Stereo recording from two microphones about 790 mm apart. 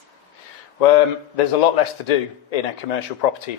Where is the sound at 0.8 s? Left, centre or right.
Left.